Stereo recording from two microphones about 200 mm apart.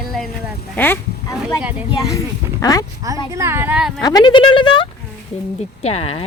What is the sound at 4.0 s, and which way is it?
Speech, 20° left (ahead or behind).